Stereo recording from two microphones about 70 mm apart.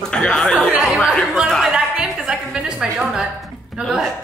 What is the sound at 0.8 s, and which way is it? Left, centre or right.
Speech, centre.